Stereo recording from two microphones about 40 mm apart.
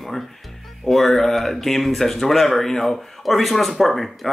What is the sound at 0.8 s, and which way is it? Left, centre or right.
Speech, centre.